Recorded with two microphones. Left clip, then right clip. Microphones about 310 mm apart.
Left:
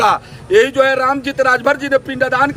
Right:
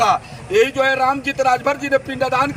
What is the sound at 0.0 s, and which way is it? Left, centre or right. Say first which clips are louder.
A man's voice: left 2 dB; centre.